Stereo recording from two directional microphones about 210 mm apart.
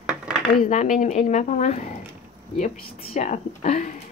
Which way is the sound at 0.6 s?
35° left (ahead or behind).